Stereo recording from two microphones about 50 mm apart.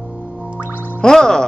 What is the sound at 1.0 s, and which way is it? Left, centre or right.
Speech, centre.